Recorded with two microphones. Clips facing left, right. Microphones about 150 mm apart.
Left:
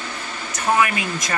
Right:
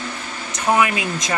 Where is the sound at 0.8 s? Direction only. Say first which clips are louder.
Right 1 dB; 20° right (ahead or behind).